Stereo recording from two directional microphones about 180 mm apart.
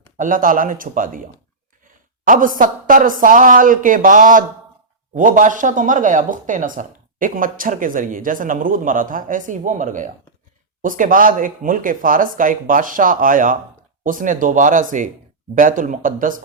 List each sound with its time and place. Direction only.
0.2 s speech: 50° right (ahead or behind)
2.2 s speech: 50° right (ahead or behind)